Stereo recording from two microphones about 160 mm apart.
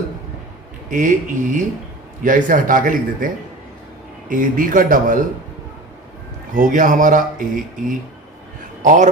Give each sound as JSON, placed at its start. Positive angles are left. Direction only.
{"t": 0.9, "sound": "speech", "side_deg": -50}
{"t": 4.3, "sound": "speech", "side_deg": -60}
{"t": 6.5, "sound": "a man's voice", "side_deg": -55}